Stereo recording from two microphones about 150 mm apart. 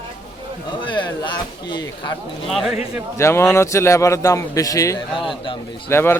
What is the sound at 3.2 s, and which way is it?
A man's voice, 20° left (ahead or behind).